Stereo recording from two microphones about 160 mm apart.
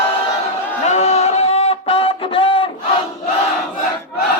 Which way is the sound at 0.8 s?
45° left (ahead or behind).